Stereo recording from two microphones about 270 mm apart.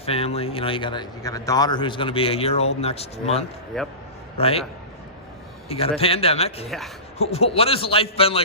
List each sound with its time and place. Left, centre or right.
0.0 s a man's voice: left
3.7 s speech: centre
4.4 s a man's voice: left
5.6 s a man's voice: left
6.7 s speech: centre
7.3 s a man's voice: left